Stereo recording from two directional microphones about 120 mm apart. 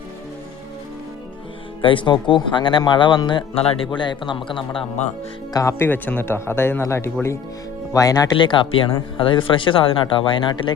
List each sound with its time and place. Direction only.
1.8 s speech: 45° left (ahead or behind)
5.5 s speech: 25° left (ahead or behind)
5.9 s speech: 15° left (ahead or behind)
8.4 s speech: 45° left (ahead or behind)